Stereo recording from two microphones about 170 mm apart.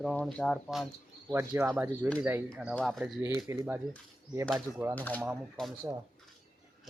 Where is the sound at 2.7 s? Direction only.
Centre (ahead or behind).